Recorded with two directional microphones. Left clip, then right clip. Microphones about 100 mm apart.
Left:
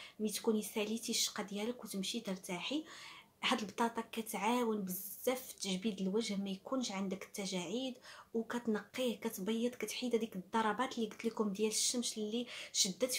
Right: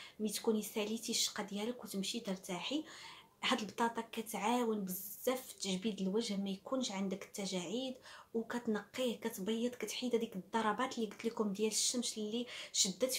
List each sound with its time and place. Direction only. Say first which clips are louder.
0.2 s speech: even; 20° left (ahead or behind)